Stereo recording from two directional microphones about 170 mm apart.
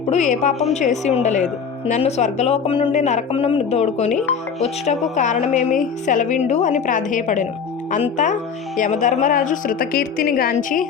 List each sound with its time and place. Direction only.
0.1 s a woman's voice: 45° left (ahead or behind)